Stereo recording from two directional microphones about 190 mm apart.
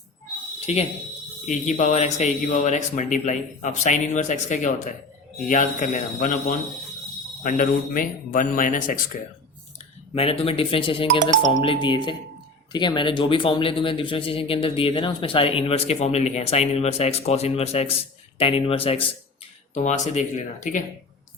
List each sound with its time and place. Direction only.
0.6 s a man's voice: 35° left (ahead or behind)
10.2 s a man's voice: 30° left (ahead or behind)